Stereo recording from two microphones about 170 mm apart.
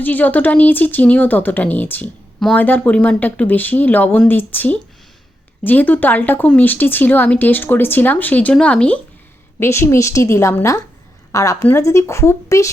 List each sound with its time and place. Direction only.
0.0 s speech: 10° left (ahead or behind)